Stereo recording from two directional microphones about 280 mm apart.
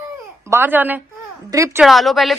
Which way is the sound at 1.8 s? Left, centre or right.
Centre.